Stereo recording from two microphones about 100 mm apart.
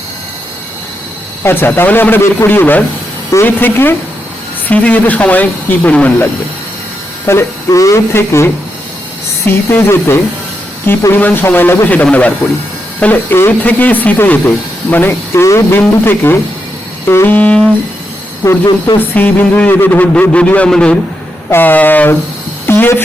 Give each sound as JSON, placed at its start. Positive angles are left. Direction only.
{"t": 1.5, "sound": "speech", "side_deg": 20}
{"t": 7.3, "sound": "speech", "side_deg": 30}
{"t": 9.6, "sound": "speech", "side_deg": 20}
{"t": 18.4, "sound": "speech", "side_deg": 40}
{"t": 18.9, "sound": "speech", "side_deg": 20}
{"t": 21.5, "sound": "speech", "side_deg": 20}